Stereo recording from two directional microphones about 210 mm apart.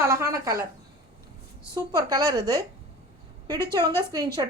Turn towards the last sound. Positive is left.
turn(degrees=-20)  # may be behind; listen again after turning